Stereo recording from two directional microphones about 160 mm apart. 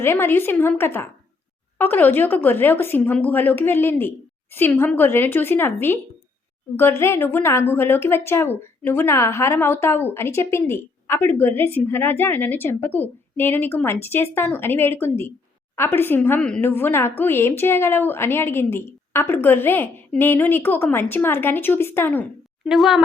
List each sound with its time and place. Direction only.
0.0 s a woman's voice: 15° left (ahead or behind)
22.6 s a woman's voice: centre (ahead or behind)